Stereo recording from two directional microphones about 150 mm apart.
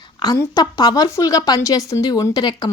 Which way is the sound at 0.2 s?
25° left (ahead or behind).